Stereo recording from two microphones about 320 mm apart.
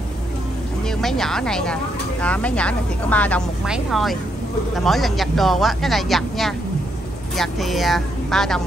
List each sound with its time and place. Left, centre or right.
0.8 s a woman's voice: centre